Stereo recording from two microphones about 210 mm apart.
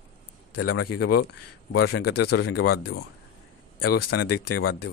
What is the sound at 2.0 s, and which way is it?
Speech, 50° left (ahead or behind).